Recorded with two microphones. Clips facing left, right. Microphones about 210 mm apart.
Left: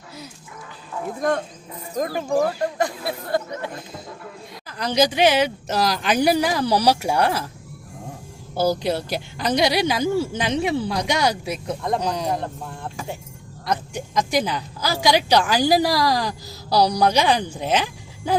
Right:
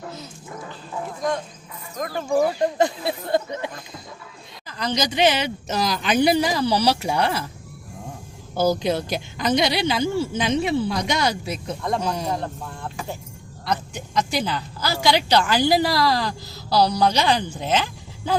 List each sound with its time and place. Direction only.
2.7 s speech: 25° right (ahead or behind)
4.8 s a woman's voice: 10° left (ahead or behind)
8.5 s a woman's voice: 10° left (ahead or behind)
13.7 s a woman's voice: 10° left (ahead or behind)